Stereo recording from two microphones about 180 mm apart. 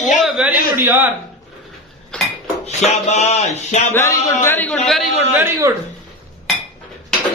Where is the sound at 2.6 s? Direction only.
40° left (ahead or behind).